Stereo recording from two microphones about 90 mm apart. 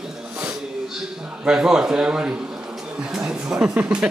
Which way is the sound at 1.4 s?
5° right (ahead or behind).